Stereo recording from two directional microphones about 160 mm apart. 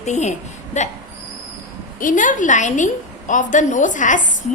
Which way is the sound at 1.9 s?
55° left (ahead or behind).